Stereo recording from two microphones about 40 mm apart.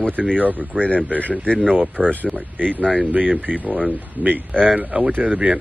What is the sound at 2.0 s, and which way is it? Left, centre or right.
Speech, right.